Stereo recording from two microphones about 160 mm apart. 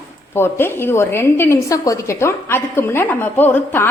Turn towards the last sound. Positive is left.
turn(degrees=10)  # may be behind; listen again after turning